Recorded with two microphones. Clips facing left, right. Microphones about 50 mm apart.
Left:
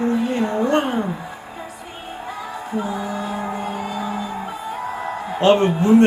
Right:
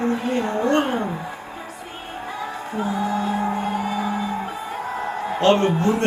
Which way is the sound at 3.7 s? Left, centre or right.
Centre.